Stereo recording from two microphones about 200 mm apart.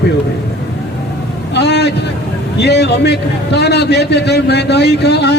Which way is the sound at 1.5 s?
60° left (ahead or behind).